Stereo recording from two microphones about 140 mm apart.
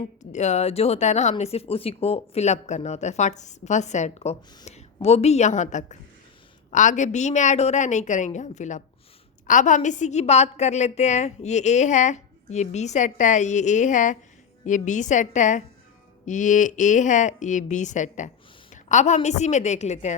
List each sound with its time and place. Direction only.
0.2 s a woman's voice: 55° left (ahead or behind)